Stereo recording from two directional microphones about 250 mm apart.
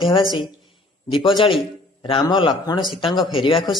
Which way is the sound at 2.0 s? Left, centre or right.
Centre.